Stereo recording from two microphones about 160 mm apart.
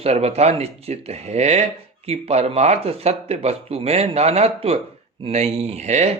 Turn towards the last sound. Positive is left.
turn(degrees=-45)  # may be behind; listen again after turning